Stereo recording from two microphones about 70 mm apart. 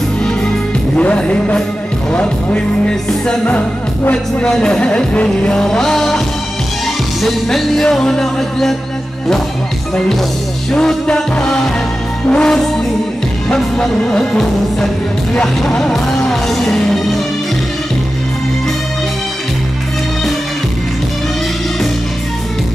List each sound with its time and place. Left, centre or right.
0.2 s music: centre
10.7 s music: centre